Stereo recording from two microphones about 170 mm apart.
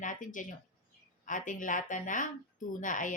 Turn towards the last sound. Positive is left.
turn(degrees=50)  # may be behind; listen again after turning